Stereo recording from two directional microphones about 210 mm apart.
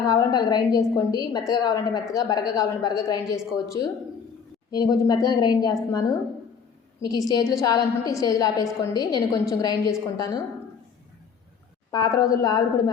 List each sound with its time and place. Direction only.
0.1 s a woman's voice: 15° left (ahead or behind)
7.0 s a woman's voice: 20° left (ahead or behind)
11.9 s a woman's voice: 15° left (ahead or behind)